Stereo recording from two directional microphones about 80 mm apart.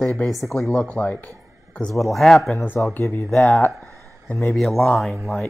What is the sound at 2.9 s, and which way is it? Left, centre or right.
Speech, left.